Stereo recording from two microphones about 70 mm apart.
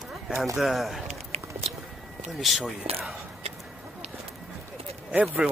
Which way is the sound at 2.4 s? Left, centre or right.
Centre.